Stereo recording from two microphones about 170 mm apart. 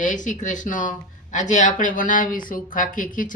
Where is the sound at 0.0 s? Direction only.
50° left (ahead or behind).